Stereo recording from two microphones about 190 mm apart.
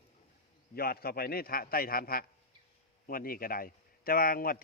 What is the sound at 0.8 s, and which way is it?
A man's voice, 55° left (ahead or behind).